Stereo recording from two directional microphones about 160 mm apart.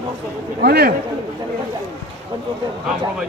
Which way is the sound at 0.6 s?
80° right.